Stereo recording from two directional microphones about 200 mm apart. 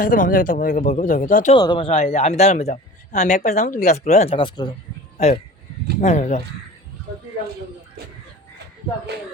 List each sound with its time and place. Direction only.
0.0 s speech: 45° left (ahead or behind)
1.5 s speech: 20° left (ahead or behind)